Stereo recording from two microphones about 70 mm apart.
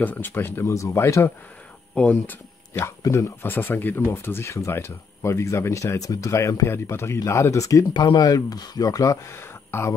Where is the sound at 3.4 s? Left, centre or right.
Left.